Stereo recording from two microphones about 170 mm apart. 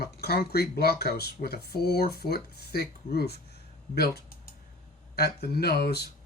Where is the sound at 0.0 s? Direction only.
65° left (ahead or behind).